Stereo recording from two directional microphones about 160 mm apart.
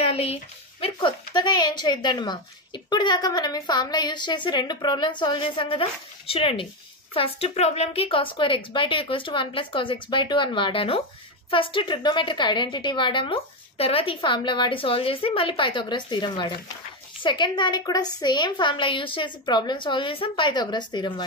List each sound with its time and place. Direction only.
0.0 s a woman's voice: 40° left (ahead or behind)